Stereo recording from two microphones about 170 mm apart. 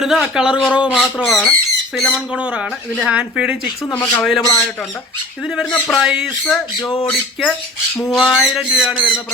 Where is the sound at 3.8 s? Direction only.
15° left (ahead or behind).